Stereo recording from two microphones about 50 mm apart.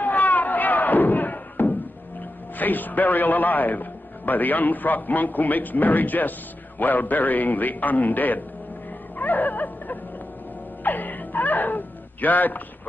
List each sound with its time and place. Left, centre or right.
0.0 s a sound: left
2.5 s a man's voice: left
9.2 s music: left
10.8 s wail: left